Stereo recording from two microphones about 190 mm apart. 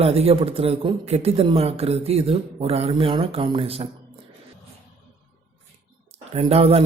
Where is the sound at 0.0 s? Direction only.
30° right (ahead or behind).